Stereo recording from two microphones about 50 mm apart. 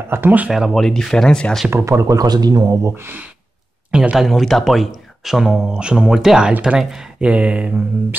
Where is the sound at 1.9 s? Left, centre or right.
Right.